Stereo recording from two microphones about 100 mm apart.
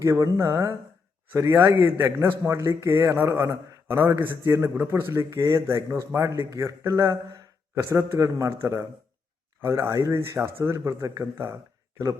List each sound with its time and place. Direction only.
0.0 s a man's voice: 30° right (ahead or behind)